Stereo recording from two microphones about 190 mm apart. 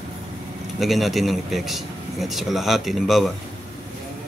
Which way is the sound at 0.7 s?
Centre (ahead or behind).